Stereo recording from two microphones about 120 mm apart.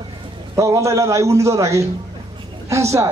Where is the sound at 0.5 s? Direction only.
25° right (ahead or behind).